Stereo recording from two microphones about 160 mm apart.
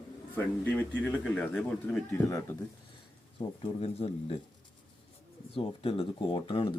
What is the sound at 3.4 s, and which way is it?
Speech, 35° left (ahead or behind).